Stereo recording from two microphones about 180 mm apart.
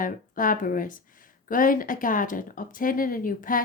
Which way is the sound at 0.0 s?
50° left (ahead or behind).